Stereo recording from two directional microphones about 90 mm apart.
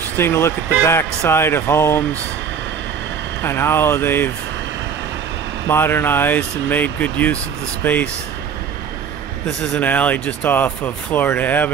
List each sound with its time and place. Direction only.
0.2 s speech: 30° left (ahead or behind)
3.4 s speech: 25° left (ahead or behind)
5.7 s speech: 25° left (ahead or behind)
9.6 s speech: 15° left (ahead or behind)